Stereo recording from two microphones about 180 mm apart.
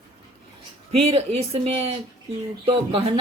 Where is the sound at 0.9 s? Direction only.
35° right (ahead or behind).